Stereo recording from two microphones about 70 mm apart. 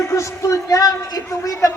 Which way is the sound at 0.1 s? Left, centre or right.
Left.